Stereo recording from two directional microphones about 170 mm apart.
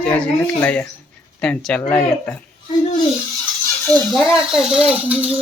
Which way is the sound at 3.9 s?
Centre (ahead or behind).